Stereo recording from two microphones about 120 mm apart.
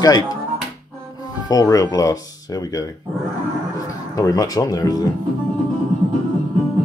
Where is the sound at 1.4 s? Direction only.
30° left (ahead or behind).